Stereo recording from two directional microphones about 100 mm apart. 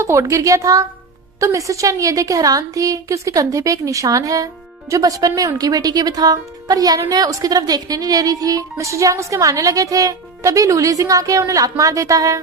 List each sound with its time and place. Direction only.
0.0 s a woman's voice: 30° right (ahead or behind)